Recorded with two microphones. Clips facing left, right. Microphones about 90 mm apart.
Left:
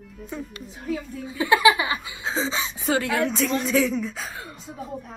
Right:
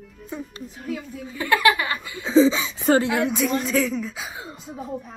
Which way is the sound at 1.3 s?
15° left (ahead or behind).